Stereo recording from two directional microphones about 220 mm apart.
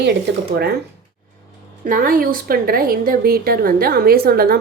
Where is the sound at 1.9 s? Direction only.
40° right (ahead or behind).